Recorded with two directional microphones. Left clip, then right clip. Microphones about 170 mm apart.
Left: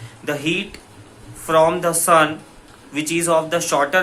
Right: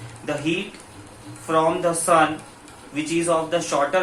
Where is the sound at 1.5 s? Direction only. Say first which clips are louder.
Left 4 dB; 30° left (ahead or behind).